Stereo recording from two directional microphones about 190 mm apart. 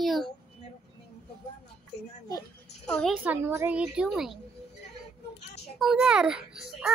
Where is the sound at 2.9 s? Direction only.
5° left (ahead or behind).